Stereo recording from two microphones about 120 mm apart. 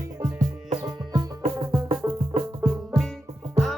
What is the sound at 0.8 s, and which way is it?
Music, 30° right (ahead or behind).